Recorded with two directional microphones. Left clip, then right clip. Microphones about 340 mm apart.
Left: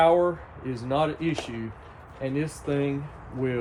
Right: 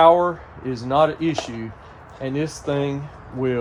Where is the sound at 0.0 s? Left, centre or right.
Centre.